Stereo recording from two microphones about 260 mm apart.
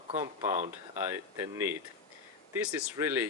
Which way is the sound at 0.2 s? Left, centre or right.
Centre.